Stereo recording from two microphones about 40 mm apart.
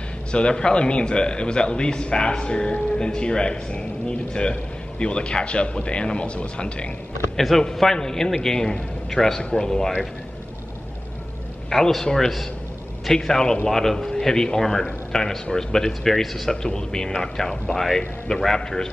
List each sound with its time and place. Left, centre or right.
0.3 s a man's voice: left
7.3 s a man's voice: centre
11.7 s a man's voice: centre